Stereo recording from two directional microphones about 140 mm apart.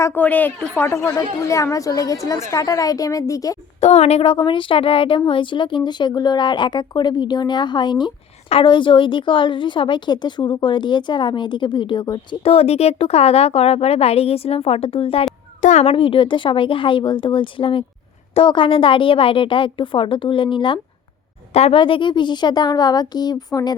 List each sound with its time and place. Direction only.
0.0 s a woman's voice: 15° left (ahead or behind)
3.8 s speech: 50° left (ahead or behind); by 12.4 s 35° left (ahead or behind)
12.4 s speech: 45° left (ahead or behind)
15.6 s a child's voice: 60° left (ahead or behind)
15.9 s speech: 40° left (ahead or behind)
21.5 s a woman's voice: 50° left (ahead or behind)
21.8 s a woman's voice: 35° left (ahead or behind)